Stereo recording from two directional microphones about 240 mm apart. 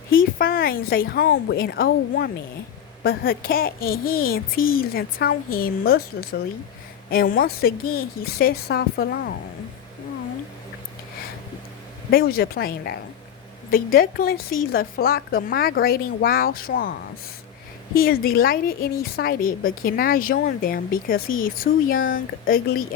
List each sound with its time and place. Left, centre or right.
0.1 s a woman's voice: left
12.1 s a woman's voice: left
17.9 s a woman's voice: left